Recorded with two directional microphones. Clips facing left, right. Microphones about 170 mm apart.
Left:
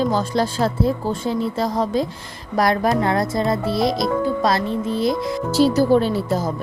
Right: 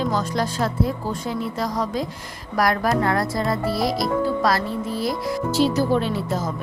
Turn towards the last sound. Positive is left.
turn(degrees=35)  # may be behind; listen again after turning